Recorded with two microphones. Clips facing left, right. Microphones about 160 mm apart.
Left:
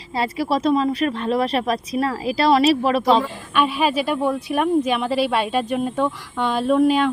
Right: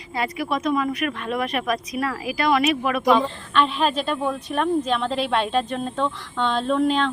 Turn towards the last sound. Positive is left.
turn(degrees=10)  # may be behind; listen again after turning